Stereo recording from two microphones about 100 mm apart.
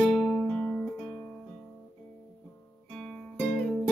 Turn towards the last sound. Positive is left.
turn(degrees=10)  # may be behind; listen again after turning